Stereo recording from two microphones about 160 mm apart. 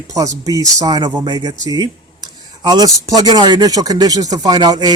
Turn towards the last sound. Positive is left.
turn(degrees=-25)  # may be behind; listen again after turning